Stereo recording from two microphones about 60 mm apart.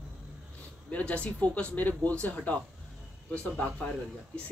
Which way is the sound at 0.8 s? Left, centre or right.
Left.